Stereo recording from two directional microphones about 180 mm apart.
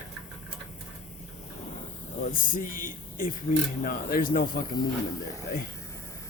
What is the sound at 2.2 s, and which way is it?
Speech, 50° left (ahead or behind).